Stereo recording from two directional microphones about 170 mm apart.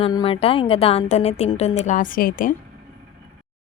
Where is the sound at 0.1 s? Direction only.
30° left (ahead or behind); by 2.6 s 55° left (ahead or behind).